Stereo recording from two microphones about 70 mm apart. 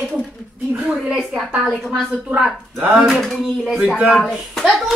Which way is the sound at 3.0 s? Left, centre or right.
Centre.